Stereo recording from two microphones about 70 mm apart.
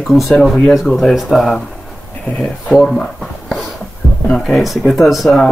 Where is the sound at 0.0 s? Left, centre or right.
Centre.